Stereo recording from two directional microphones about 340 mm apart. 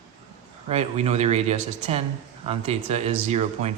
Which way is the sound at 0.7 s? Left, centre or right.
Centre.